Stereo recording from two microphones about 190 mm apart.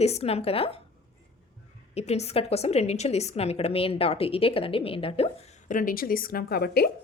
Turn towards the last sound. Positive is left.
turn(degrees=55)  # may be behind; listen again after turning